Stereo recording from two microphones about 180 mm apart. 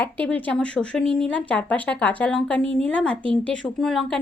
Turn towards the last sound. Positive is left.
turn(degrees=0)  # may be behind; listen again after turning